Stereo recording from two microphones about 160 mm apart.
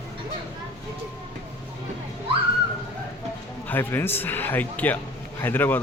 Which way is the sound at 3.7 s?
15° left (ahead or behind).